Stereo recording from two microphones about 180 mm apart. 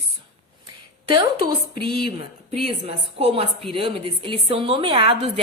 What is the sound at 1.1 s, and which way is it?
Speech, 25° right (ahead or behind).